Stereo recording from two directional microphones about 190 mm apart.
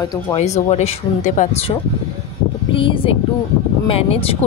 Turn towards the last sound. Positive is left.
turn(degrees=30)  # may be behind; listen again after turning